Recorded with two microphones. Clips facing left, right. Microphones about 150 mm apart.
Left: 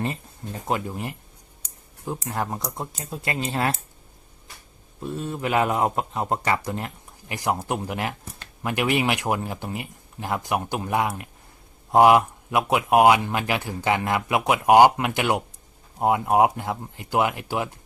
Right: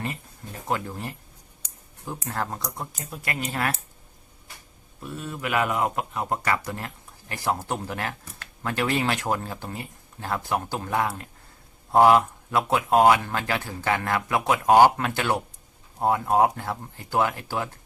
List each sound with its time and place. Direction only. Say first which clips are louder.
0.7 s speech: left 2 dB; 20° left (ahead or behind)
2.2 s speech: left 1 dB; 15° left (ahead or behind)
4.9 s speech: left 5 dB; 30° left (ahead or behind)